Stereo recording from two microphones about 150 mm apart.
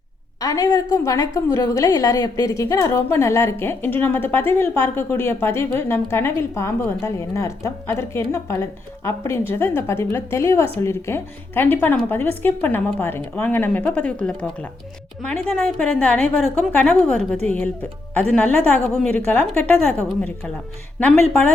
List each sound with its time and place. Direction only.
0.4 s a woman's voice: 25° left (ahead or behind)